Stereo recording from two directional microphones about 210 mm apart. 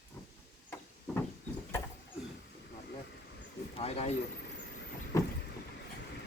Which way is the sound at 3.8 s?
30° left (ahead or behind).